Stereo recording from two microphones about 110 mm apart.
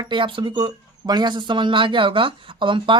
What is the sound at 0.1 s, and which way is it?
Speech, 50° right (ahead or behind).